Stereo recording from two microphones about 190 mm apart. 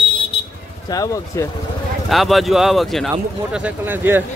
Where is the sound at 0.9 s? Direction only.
20° left (ahead or behind).